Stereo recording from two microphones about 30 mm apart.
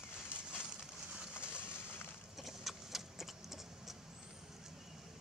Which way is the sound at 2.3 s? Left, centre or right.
Centre.